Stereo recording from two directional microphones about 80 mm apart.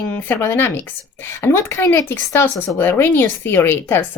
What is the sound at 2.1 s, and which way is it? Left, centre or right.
A woman's voice, left.